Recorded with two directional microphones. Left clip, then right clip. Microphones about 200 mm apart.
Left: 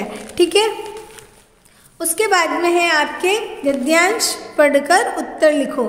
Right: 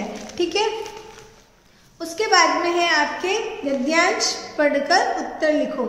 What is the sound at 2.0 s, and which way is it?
A woman's voice, 50° left (ahead or behind).